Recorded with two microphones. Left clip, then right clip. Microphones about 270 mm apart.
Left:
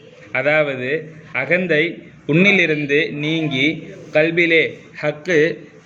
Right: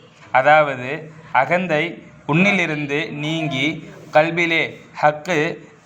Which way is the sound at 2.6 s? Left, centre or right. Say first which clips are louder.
Left 5 dB; right.